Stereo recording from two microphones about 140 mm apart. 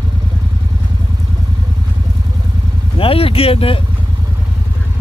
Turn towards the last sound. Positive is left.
turn(degrees=45)  # may be behind; listen again after turning